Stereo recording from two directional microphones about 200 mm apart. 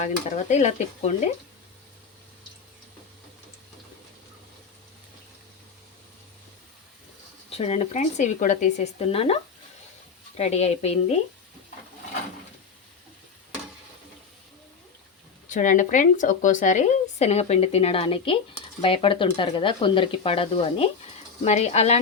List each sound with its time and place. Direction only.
0.0 s speech: 35° left (ahead or behind)
7.5 s speech: 30° left (ahead or behind)
15.4 s speech: 40° left (ahead or behind)